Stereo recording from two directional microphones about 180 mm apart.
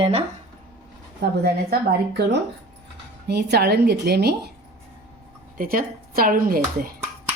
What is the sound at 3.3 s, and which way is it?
A woman's voice, 65° right (ahead or behind).